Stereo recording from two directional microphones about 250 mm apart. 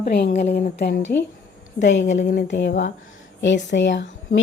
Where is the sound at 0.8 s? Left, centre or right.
Left.